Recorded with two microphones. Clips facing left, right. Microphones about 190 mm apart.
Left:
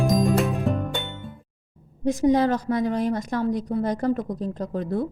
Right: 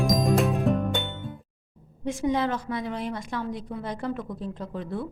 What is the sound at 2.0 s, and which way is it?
A woman's voice, 40° left (ahead or behind).